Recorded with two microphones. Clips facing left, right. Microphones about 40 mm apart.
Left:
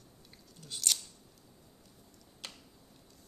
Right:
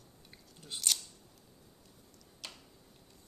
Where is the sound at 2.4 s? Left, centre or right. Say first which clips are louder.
Even; left.